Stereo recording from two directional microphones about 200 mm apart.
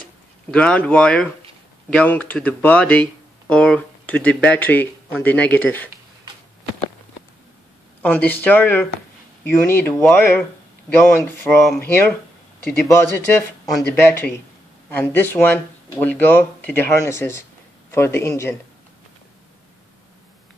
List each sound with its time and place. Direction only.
0.5 s speech: 5° left (ahead or behind)
8.0 s speech: 10° left (ahead or behind)